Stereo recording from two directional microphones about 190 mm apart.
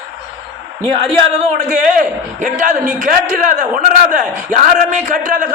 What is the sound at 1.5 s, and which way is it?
A man's voice, 45° right (ahead or behind).